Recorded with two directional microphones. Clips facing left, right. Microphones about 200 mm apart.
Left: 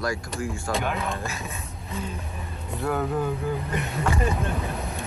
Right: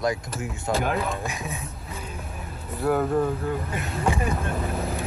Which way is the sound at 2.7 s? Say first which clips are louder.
Right 4 dB; centre (ahead or behind).